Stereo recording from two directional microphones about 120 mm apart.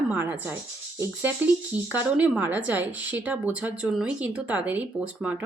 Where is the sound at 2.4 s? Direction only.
15° right (ahead or behind).